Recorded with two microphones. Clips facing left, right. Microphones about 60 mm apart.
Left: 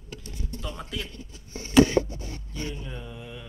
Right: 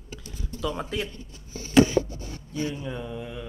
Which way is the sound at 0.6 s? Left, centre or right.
Right.